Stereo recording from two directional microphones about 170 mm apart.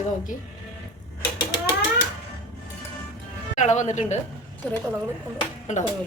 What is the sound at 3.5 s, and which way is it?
Speech, 45° left (ahead or behind).